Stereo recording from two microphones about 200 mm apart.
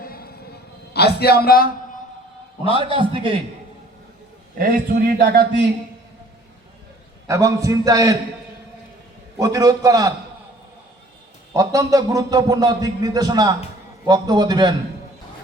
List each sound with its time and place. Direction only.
0.0 s a sound: 50° left (ahead or behind)
2.7 s a man's voice: 25° right (ahead or behind)
4.5 s a man's voice: 45° right (ahead or behind)
7.3 s a man's voice: 15° right (ahead or behind)
9.4 s a man's voice: 15° right (ahead or behind)
11.5 s a man's voice: 15° right (ahead or behind)